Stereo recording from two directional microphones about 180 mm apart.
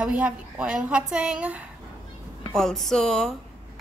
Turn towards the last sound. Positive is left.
turn(degrees=5)  # may be behind; listen again after turning